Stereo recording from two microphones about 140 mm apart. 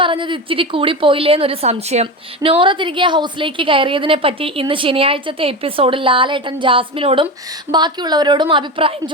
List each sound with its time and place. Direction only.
0.0 s a woman's voice: 35° right (ahead or behind)
7.7 s a woman's voice: 30° right (ahead or behind)